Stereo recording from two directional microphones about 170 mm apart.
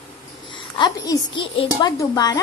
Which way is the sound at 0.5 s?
25° left (ahead or behind).